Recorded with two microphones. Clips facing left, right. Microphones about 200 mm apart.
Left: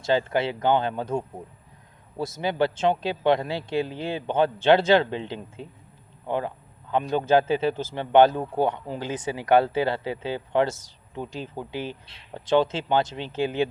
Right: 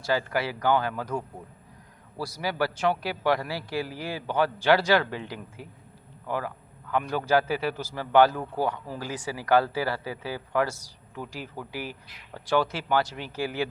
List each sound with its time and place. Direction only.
0.0 s a man's voice: 25° left (ahead or behind)